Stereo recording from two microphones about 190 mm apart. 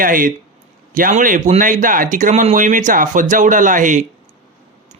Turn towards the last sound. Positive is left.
turn(degrees=-40)  # may be behind; listen again after turning